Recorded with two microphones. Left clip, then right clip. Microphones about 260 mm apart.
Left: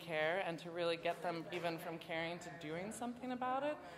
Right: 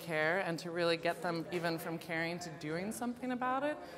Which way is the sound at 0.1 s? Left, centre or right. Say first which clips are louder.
Right 4 dB; right.